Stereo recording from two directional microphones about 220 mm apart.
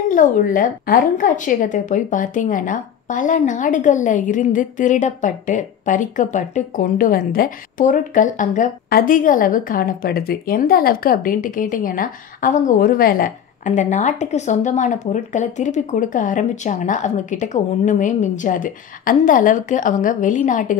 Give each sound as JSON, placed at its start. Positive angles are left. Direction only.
{"t": 0.1, "sound": "a woman's voice", "side_deg": 35}